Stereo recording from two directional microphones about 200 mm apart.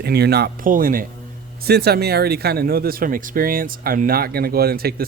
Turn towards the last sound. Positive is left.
turn(degrees=-50)  # may be behind; listen again after turning